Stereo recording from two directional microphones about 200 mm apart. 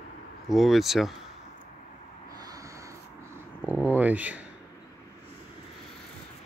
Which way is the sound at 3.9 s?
10° right (ahead or behind).